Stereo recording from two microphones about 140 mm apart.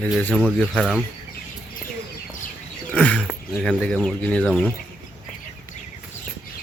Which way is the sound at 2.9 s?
10° left (ahead or behind).